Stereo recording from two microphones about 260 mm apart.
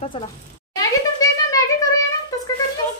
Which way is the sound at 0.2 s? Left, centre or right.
Centre.